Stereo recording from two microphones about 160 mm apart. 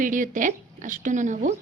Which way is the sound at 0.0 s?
55° right (ahead or behind).